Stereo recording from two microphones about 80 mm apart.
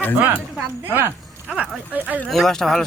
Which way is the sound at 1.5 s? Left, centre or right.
Centre.